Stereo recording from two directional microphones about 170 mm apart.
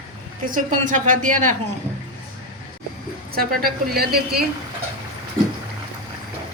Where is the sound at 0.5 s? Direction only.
50° right (ahead or behind).